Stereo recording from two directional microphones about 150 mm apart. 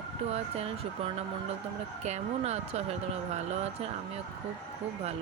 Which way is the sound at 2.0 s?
45° right (ahead or behind).